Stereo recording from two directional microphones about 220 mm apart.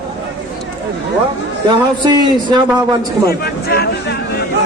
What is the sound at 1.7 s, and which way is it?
Speech, 20° right (ahead or behind).